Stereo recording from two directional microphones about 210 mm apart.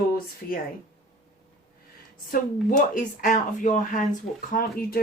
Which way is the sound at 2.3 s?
40° left (ahead or behind).